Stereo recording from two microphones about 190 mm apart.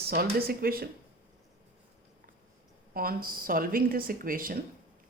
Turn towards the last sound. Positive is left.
turn(degrees=-50)  # may be behind; listen again after turning